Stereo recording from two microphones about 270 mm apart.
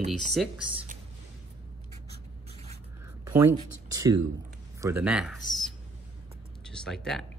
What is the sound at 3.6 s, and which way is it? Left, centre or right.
Speech, right.